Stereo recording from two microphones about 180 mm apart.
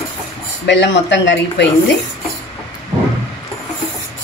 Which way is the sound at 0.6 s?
80° left.